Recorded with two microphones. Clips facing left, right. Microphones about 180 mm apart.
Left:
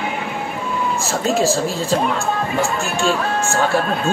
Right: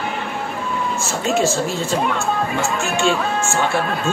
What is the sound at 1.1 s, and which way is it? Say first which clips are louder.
Speech: left 1 dB; 35° left (ahead or behind).